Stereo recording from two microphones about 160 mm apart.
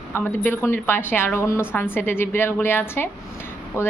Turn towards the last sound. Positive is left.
turn(degrees=15)  # may be behind; listen again after turning